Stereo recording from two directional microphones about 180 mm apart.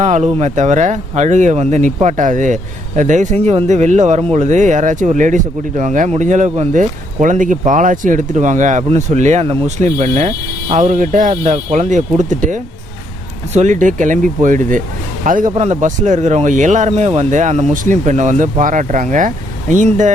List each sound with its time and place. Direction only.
0.0 s speech: 35° right (ahead or behind)
13.6 s speech: 45° right (ahead or behind)